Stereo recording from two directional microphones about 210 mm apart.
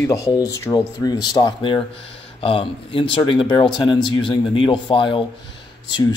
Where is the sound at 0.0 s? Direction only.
15° left (ahead or behind).